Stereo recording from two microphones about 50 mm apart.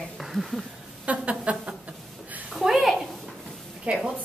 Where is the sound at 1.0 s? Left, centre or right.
Right.